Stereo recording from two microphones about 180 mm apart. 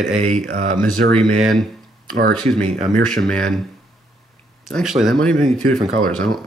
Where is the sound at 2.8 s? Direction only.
5° left (ahead or behind).